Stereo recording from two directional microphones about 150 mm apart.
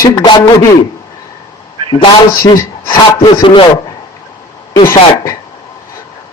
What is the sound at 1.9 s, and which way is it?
A man's voice, 25° left (ahead or behind).